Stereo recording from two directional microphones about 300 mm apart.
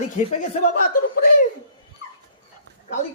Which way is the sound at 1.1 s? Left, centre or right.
Left.